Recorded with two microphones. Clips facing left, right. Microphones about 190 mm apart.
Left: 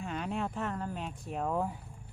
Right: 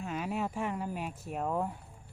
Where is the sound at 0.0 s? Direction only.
5° right (ahead or behind).